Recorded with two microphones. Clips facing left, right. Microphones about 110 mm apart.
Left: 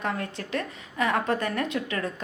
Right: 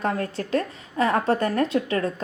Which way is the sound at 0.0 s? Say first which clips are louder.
Right 5 dB; 35° right (ahead or behind).